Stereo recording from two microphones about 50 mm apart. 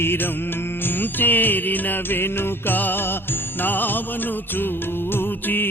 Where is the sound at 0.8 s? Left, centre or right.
Left.